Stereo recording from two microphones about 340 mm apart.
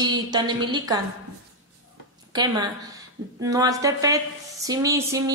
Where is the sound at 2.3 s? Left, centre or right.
Centre.